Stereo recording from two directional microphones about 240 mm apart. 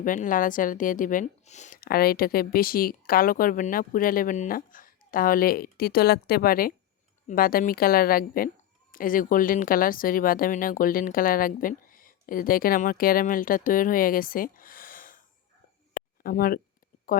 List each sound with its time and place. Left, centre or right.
0.0 s speech: left
16.0 s a sound: left
17.1 s speech: left